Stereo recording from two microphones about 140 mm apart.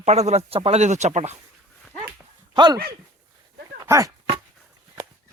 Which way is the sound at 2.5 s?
30° right (ahead or behind).